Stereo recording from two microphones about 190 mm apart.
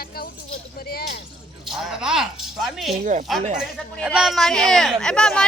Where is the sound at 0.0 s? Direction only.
55° left (ahead or behind).